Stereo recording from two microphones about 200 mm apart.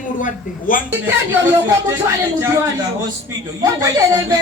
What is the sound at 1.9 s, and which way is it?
Speech, 10° right (ahead or behind).